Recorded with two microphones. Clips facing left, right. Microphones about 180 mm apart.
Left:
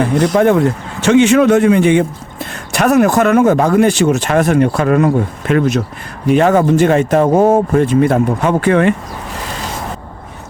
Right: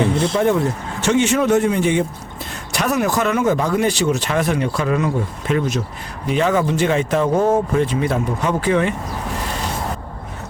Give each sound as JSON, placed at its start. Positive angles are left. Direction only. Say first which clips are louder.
{"t": 0.3, "sound": "speech", "louder": "left 8 dB", "side_deg": 75}